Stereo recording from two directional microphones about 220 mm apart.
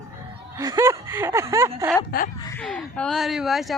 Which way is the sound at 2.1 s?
45° left (ahead or behind).